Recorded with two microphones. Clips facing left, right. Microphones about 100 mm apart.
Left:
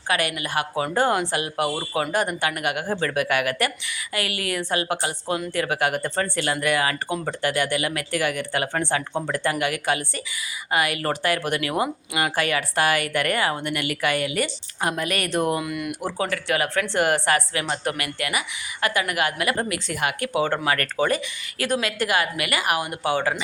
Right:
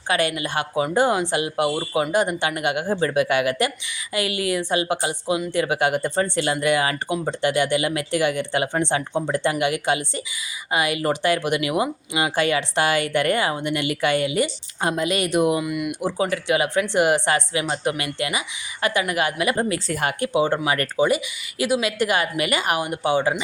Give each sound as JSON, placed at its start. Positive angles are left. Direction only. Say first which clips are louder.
{"t": 0.1, "sound": "speech", "louder": "right 2 dB", "side_deg": -25}
{"t": 16.0, "sound": "speech", "louder": "right 3 dB", "side_deg": -15}
{"t": 20.1, "sound": "speech", "louder": "right 4 dB", "side_deg": -25}